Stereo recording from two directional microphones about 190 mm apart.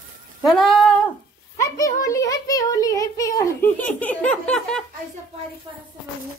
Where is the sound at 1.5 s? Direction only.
15° left (ahead or behind).